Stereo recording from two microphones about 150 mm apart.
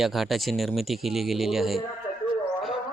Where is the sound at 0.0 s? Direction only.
Centre (ahead or behind).